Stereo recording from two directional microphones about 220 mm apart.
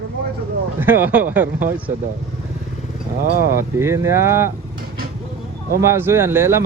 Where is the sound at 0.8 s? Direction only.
10° right (ahead or behind).